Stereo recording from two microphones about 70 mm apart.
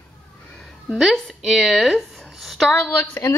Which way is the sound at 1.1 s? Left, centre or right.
Centre.